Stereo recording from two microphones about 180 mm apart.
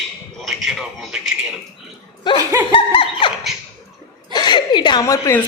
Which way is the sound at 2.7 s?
25° left (ahead or behind).